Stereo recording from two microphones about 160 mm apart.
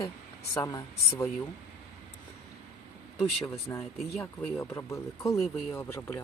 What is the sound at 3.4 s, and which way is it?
Speech, 20° left (ahead or behind).